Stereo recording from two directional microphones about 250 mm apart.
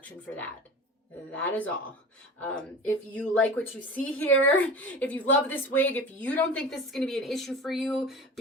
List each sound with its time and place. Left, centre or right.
1.4 s a woman's voice: centre